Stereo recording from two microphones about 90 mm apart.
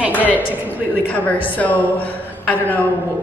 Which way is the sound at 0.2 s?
20° right (ahead or behind).